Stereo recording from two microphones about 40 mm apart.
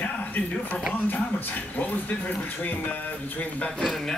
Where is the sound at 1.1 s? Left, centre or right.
Left.